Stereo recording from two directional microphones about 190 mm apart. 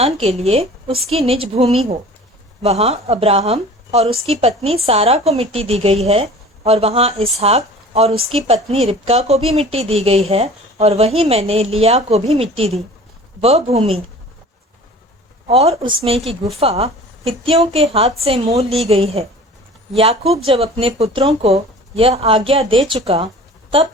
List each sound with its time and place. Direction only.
0.0 s speech: 35° right (ahead or behind)
15.4 s a woman's voice: 30° right (ahead or behind)